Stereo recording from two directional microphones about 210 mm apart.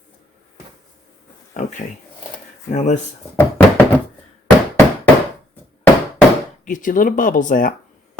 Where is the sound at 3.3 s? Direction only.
10° left (ahead or behind).